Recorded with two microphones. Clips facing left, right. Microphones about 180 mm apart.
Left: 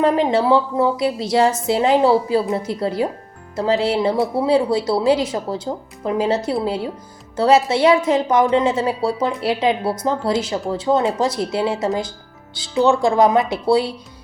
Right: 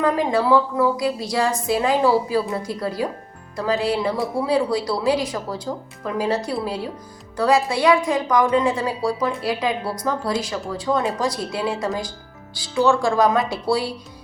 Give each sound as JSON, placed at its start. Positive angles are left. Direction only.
{"t": 0.0, "sound": "speech", "side_deg": 25}